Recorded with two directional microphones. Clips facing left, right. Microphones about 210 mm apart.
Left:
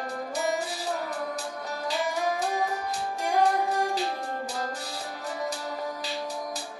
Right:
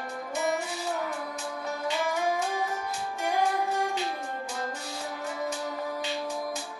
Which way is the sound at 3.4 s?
35° left (ahead or behind).